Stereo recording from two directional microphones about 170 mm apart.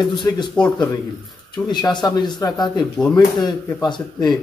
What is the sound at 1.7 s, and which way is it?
A man's voice, 25° left (ahead or behind).